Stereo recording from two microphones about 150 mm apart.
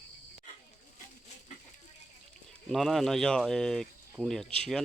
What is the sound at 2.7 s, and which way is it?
Speech, centre (ahead or behind).